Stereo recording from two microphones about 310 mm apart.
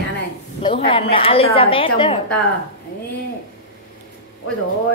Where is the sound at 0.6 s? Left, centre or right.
Centre.